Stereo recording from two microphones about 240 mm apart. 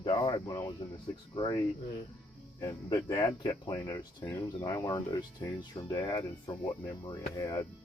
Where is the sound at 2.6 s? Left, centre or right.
Centre.